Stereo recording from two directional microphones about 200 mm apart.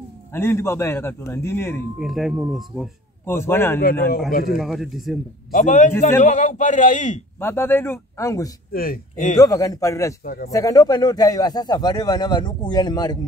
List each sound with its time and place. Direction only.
0.3 s a man's voice: 10° left (ahead or behind)
2.0 s a man's voice: centre (ahead or behind)
3.3 s a man's voice: 10° left (ahead or behind)
4.3 s a man's voice: 45° left (ahead or behind)
4.6 s a man's voice: centre (ahead or behind)
5.5 s a man's voice: 40° left (ahead or behind)
7.3 s a man's voice: 10° left (ahead or behind)
8.7 s a man's voice: 45° left (ahead or behind)
9.4 s a man's voice: 15° left (ahead or behind)
10.2 s a man's voice: 45° left (ahead or behind)
10.5 s speech: 15° left (ahead or behind)